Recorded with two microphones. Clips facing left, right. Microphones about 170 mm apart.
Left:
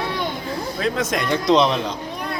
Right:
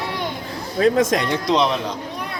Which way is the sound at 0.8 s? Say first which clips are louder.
Right 7 dB; 40° right (ahead or behind).